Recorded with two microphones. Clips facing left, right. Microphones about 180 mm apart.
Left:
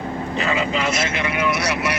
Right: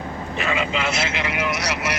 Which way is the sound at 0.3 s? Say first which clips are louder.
Left 2 dB; 35° left (ahead or behind).